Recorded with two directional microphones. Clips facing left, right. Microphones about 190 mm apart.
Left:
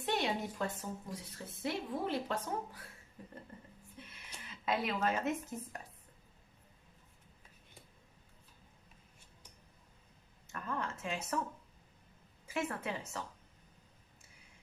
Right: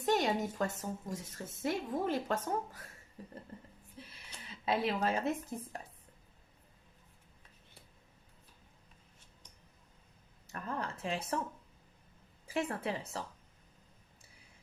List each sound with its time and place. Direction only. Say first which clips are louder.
0.0 s a woman's voice: right 4 dB; 45° right (ahead or behind)
3.9 s music: right 2 dB; 35° right (ahead or behind)
4.6 s speech: right 2 dB; 30° right (ahead or behind)
10.4 s speech: right 1 dB; 35° right (ahead or behind)
12.5 s speech: right 2 dB; 35° right (ahead or behind)